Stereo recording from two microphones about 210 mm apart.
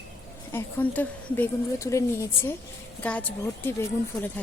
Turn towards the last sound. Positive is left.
turn(degrees=10)  # may be behind; listen again after turning